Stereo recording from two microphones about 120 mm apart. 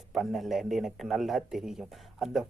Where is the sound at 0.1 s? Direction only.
Centre (ahead or behind).